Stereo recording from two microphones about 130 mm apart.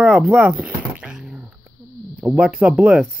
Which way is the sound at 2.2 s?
10° right (ahead or behind).